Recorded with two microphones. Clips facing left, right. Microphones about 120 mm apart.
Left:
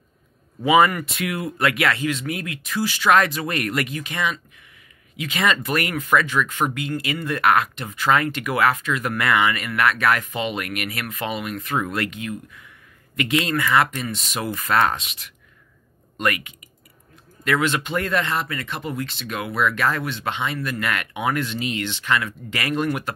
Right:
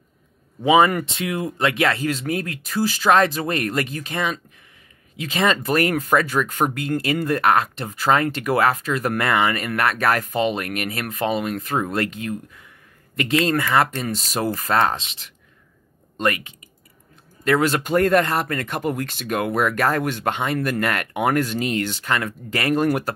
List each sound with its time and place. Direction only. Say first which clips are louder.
0.7 s speech: right 1 dB; 25° right (ahead or behind)